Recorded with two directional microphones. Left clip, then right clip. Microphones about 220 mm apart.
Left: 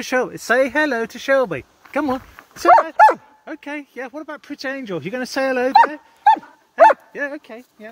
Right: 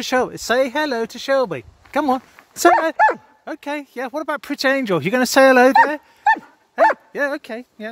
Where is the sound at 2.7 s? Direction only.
5° left (ahead or behind).